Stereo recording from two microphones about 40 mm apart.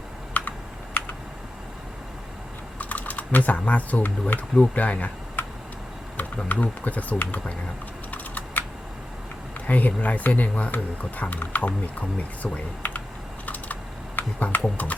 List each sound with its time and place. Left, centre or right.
0.4 s computer keyboard: left
0.9 s computer keyboard: left
2.7 s speech: left
4.5 s speech: left
5.4 s a sound: left
6.1 s speech: left
8.1 s typing: left
9.6 s speech: left
12.8 s typing: left
14.2 s speech: left